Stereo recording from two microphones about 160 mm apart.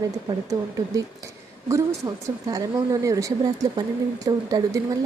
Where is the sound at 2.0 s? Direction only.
20° right (ahead or behind).